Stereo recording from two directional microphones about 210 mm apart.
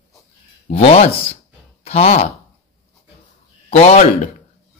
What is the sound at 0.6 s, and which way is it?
Speech, 30° left (ahead or behind).